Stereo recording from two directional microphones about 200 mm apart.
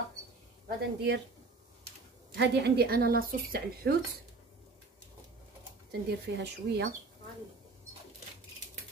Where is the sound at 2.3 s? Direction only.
60° right (ahead or behind).